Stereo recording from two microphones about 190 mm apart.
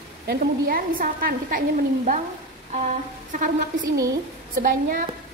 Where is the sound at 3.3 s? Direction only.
45° right (ahead or behind).